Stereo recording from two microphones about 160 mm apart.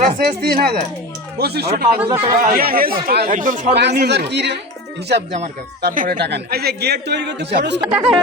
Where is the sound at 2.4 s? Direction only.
65° right (ahead or behind).